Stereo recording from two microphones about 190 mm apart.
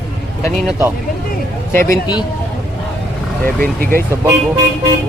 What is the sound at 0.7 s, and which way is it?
Speech, 10° right (ahead or behind).